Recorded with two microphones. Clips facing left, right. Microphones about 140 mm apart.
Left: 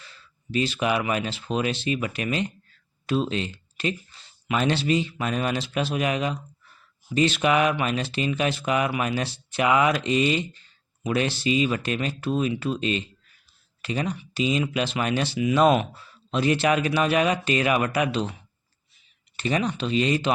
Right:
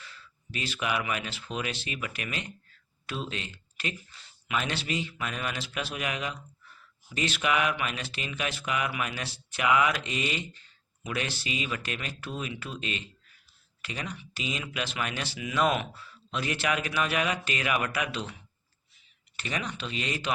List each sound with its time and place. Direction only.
0.0 s speech: 25° left (ahead or behind)
19.4 s speech: 30° left (ahead or behind)